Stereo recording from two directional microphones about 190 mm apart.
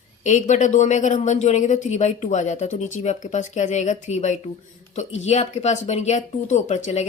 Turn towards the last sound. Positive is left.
turn(degrees=35)  # may be behind; listen again after turning